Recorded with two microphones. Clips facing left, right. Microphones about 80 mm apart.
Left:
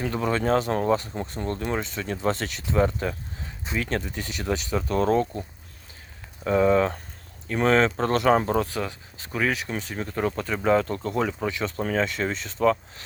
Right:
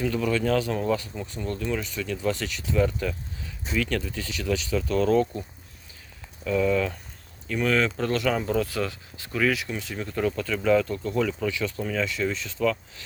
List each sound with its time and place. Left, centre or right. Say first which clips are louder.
0.0 s speech: even; left
8.6 s speech: right 1 dB; left
11.3 s speech: even; left
11.8 s speech: left 4 dB; left